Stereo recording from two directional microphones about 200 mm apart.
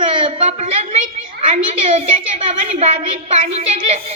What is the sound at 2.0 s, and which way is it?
Speech, 30° right (ahead or behind).